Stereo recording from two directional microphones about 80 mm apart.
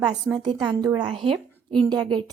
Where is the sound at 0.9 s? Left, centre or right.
Right.